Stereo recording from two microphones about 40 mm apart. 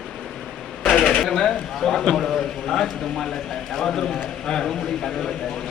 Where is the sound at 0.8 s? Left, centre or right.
Centre.